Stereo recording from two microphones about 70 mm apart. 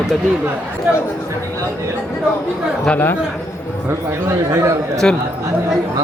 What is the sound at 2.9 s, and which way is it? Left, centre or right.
Speech, left.